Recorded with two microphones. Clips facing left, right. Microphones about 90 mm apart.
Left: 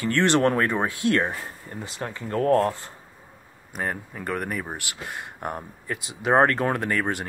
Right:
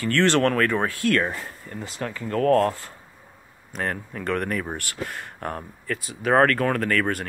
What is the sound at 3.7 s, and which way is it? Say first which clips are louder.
Speech: right 1 dB; 10° left (ahead or behind).